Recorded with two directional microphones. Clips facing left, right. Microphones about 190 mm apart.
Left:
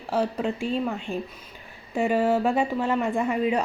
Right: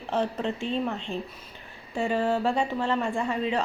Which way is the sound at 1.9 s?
15° left (ahead or behind).